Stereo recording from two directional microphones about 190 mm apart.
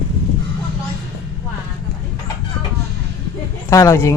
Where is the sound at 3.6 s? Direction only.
15° left (ahead or behind).